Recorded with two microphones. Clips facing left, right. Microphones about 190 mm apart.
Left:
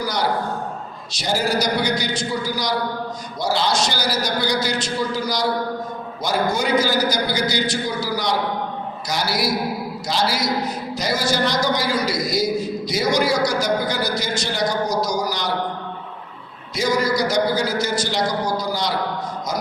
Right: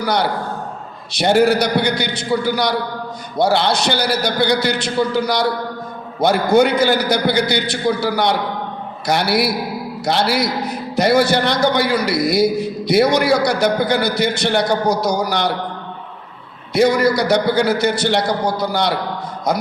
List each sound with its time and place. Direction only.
0.0 s a man's voice: 60° right (ahead or behind)
16.7 s a man's voice: 60° right (ahead or behind)